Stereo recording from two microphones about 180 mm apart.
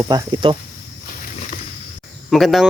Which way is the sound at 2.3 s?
Centre (ahead or behind).